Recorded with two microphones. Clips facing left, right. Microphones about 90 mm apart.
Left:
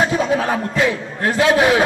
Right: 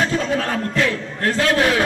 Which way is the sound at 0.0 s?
15° left (ahead or behind).